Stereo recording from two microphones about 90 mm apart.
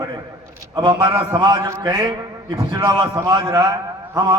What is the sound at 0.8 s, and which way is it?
A man's voice, 50° right (ahead or behind).